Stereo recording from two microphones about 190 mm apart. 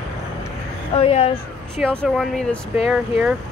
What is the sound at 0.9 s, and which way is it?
Speech, 30° left (ahead or behind).